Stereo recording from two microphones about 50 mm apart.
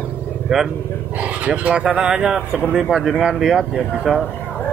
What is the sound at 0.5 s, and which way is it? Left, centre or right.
Speech, centre.